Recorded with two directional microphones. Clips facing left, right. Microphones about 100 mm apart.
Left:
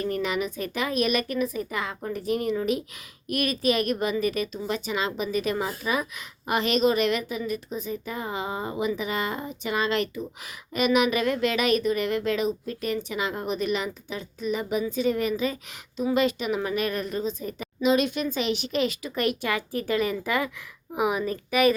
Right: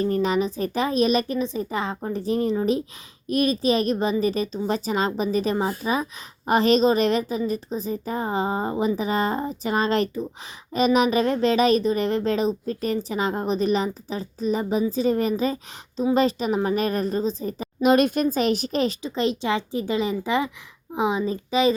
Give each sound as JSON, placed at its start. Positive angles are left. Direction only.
{"t": 0.0, "sound": "a woman's voice", "side_deg": -35}
{"t": 17.8, "sound": "speech", "side_deg": -45}